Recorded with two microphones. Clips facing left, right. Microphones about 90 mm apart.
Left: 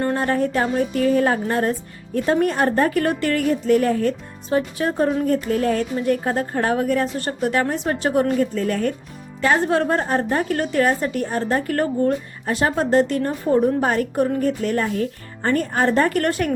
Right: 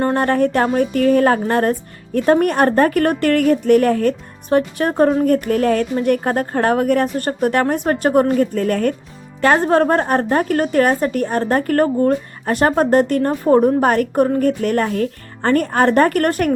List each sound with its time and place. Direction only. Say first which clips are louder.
0.1 s a woman's voice: right 4 dB; 60° right (ahead or behind)